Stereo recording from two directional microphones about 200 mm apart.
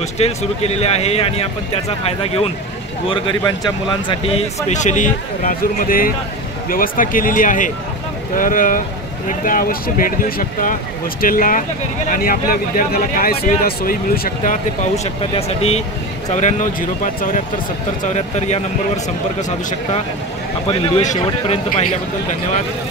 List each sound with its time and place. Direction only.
0.2 s a man's voice: 30° left (ahead or behind)
4.6 s a man's voice: 35° left (ahead or behind)
15.3 s a man's voice: 30° left (ahead or behind)
20.6 s a man's voice: 30° left (ahead or behind)